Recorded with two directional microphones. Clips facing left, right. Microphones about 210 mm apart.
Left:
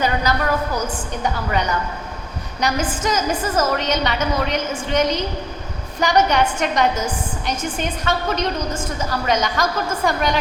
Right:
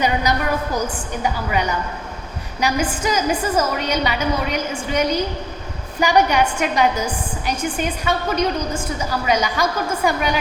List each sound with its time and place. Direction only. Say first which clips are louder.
0.0 s a woman's voice: right 1 dB; 15° right (ahead or behind)